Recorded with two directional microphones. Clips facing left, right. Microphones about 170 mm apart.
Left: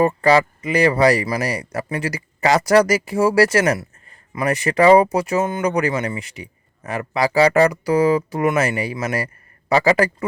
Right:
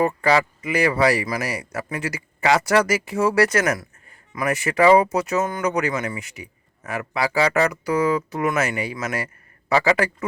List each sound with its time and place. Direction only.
0.0 s speech: 35° left (ahead or behind)